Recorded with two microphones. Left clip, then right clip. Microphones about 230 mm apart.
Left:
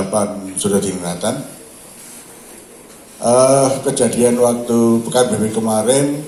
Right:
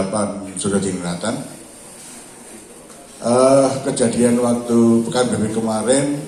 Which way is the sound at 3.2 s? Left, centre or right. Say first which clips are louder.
Left 2 dB; left.